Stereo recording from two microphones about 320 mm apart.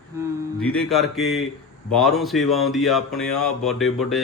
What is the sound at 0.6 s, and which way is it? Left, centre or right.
Speech, centre.